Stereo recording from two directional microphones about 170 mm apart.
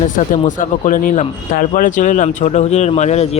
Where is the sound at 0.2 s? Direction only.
50° left (ahead or behind).